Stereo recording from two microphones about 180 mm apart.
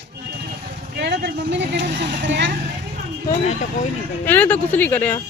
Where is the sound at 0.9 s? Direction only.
70° right (ahead or behind); by 2.5 s 85° right.